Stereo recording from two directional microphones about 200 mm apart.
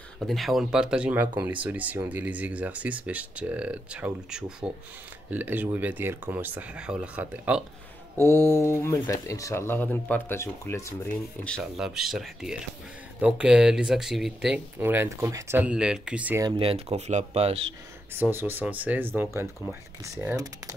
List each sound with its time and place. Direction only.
0.3 s speech: centre (ahead or behind)
8.2 s speech: 10° left (ahead or behind)
11.4 s speech: centre (ahead or behind)
16.4 s speech: 25° right (ahead or behind)
18.1 s speech: 10° right (ahead or behind)